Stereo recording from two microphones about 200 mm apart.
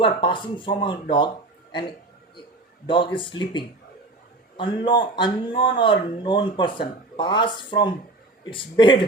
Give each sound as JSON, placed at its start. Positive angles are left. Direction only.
{"t": 0.0, "sound": "speech", "side_deg": 25}
{"t": 2.8, "sound": "speech", "side_deg": 25}